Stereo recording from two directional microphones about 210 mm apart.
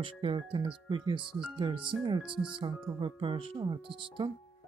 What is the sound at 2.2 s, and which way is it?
Speech, 5° right (ahead or behind).